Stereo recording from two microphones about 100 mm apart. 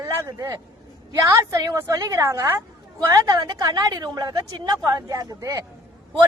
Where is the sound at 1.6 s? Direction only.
40° right (ahead or behind).